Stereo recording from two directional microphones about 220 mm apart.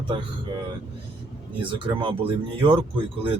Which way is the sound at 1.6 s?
20° right (ahead or behind).